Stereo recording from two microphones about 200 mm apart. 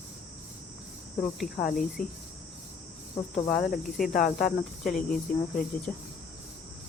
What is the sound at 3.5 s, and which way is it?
Cricket, 45° left (ahead or behind).